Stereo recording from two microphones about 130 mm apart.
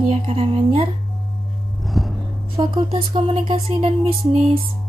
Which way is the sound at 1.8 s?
Centre (ahead or behind).